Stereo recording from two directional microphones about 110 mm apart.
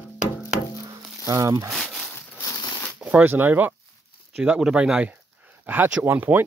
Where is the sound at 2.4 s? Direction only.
35° left (ahead or behind).